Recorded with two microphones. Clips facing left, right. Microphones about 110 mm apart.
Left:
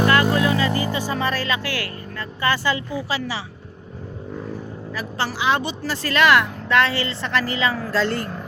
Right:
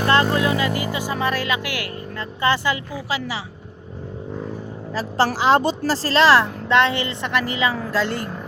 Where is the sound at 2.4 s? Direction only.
20° right (ahead or behind).